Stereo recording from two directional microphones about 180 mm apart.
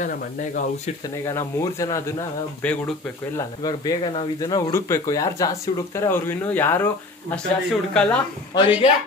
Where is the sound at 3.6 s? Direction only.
20° left (ahead or behind).